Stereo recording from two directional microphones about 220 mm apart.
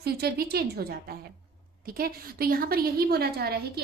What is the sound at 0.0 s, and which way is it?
A woman's voice, 45° right (ahead or behind).